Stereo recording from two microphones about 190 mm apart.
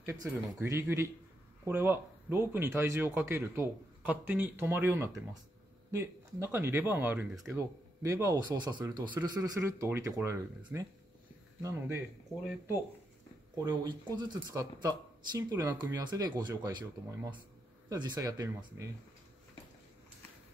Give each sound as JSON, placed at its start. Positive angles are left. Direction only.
{"t": 0.0, "sound": "speech", "side_deg": -15}
{"t": 12.4, "sound": "speech", "side_deg": -10}